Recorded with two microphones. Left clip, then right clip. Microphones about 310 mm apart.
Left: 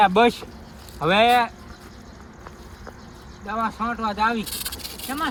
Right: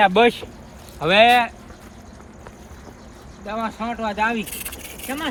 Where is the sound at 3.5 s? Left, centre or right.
Centre.